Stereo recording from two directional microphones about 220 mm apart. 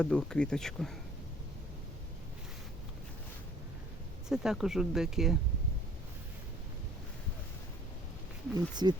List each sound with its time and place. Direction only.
0.0 s speech: 5° left (ahead or behind)
4.3 s speech: 5° right (ahead or behind)
8.5 s speech: 20° right (ahead or behind)